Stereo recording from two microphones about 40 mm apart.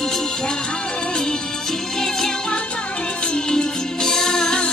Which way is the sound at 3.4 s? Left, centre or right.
Centre.